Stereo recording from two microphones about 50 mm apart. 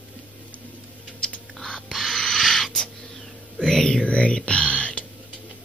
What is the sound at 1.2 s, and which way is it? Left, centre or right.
Rodents, centre.